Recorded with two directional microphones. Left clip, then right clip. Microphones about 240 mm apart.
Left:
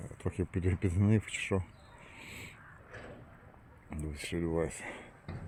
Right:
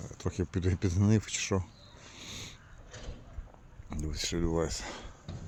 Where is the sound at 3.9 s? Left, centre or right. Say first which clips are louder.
Right 5 dB; centre.